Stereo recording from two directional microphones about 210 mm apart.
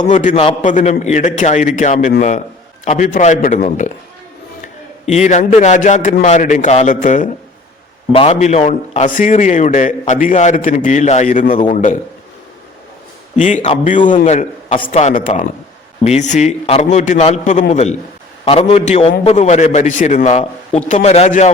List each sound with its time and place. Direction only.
0.1 s a man's voice: 35° left (ahead or behind)
5.0 s a man's voice: 35° left (ahead or behind)
13.3 s a man's voice: 35° left (ahead or behind)